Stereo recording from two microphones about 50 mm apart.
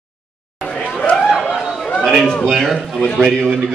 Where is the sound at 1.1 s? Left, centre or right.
Centre.